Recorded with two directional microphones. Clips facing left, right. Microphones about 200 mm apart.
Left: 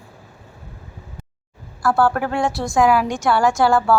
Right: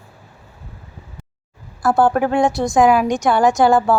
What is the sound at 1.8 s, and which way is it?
A woman's voice, 20° right (ahead or behind).